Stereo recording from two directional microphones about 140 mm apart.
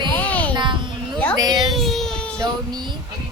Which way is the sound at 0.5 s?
35° right (ahead or behind).